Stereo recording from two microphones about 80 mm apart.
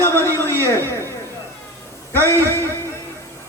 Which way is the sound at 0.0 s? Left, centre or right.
Left.